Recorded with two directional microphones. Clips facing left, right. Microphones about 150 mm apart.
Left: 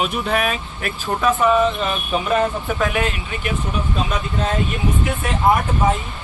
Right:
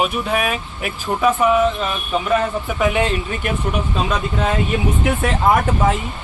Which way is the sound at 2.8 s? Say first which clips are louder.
Right 4 dB; 25° right (ahead or behind).